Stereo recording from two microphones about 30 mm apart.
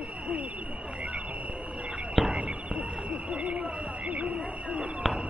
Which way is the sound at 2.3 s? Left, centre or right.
Right.